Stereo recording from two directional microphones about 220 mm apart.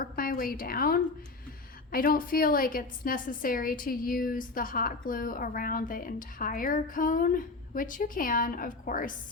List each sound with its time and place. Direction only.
0.0 s a woman's voice: 40° left (ahead or behind)